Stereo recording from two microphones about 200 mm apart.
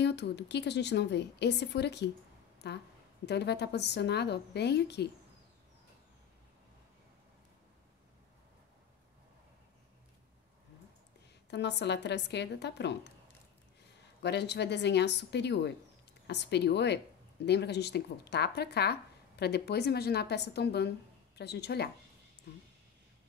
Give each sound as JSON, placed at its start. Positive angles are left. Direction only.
{"t": 0.0, "sound": "speech", "side_deg": 60}
{"t": 11.5, "sound": "speech", "side_deg": 60}
{"t": 14.2, "sound": "speech", "side_deg": 55}